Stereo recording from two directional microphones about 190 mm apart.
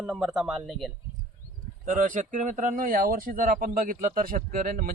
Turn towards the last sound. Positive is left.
turn(degrees=-50)  # may be behind; listen again after turning